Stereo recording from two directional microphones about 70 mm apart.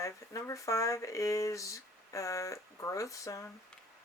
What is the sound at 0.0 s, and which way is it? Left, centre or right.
Speech, left.